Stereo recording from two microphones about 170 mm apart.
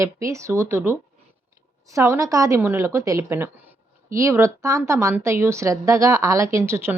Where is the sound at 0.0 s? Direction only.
20° right (ahead or behind).